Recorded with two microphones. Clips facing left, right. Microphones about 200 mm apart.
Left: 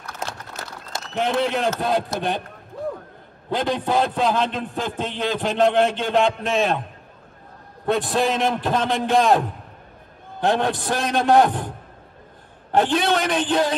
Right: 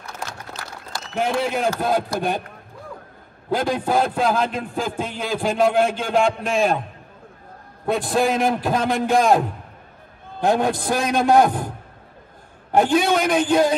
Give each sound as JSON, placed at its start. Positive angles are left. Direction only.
{"t": 1.1, "sound": "a man's voice", "side_deg": 0}
{"t": 3.4, "sound": "a man's voice", "side_deg": -5}
{"t": 7.8, "sound": "a man's voice", "side_deg": 0}
{"t": 10.4, "sound": "a man's voice", "side_deg": -5}
{"t": 12.7, "sound": "a man's voice", "side_deg": -10}